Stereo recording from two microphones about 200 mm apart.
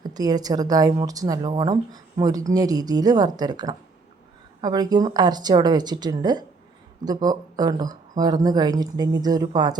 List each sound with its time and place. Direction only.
0.1 s a woman's voice: 20° right (ahead or behind)